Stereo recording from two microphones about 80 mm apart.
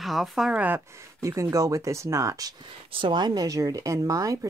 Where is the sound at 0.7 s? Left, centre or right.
Right.